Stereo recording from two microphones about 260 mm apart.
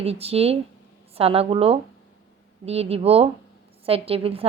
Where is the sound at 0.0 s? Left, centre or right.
Right.